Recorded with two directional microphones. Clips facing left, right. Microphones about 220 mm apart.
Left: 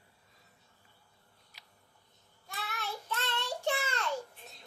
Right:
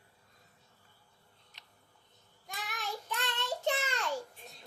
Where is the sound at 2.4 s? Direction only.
15° right (ahead or behind).